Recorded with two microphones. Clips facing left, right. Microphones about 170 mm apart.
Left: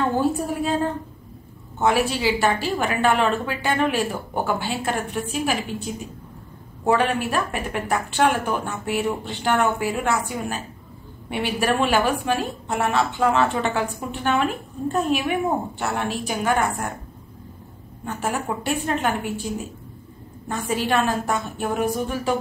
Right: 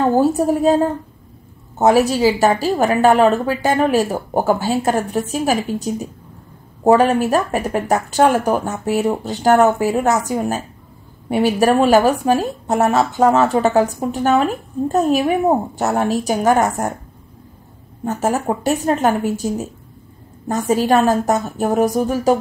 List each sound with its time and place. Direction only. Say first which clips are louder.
0.0 s a woman's voice: right 7 dB; 40° right (ahead or behind)
18.0 s a woman's voice: right 7 dB; 40° right (ahead or behind)